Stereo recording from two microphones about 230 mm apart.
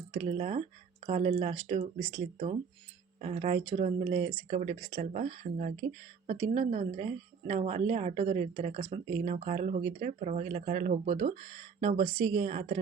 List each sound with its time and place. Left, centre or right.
0.1 s speech: right
3.2 s speech: right